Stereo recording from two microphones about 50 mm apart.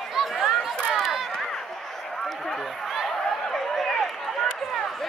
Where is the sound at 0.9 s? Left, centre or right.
Centre.